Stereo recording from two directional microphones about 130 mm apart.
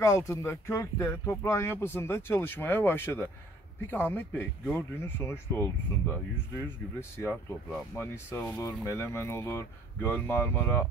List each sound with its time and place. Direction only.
0.0 s speech: 20° left (ahead or behind)